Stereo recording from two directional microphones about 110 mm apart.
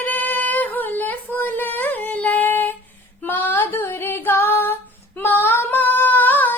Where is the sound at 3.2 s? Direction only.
20° left (ahead or behind).